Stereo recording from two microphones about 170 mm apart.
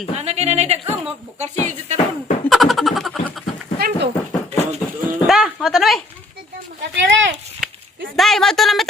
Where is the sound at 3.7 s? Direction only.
65° right (ahead or behind).